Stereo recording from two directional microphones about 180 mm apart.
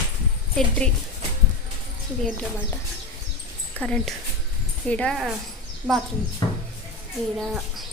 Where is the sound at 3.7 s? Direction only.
5° left (ahead or behind).